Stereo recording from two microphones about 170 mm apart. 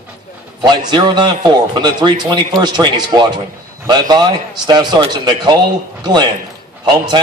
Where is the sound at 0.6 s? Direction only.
25° right (ahead or behind).